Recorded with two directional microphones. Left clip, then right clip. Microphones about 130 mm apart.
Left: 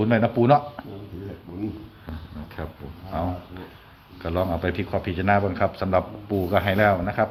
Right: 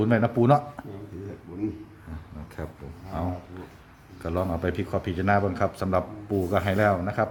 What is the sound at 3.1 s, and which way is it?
Speech, 25° right (ahead or behind).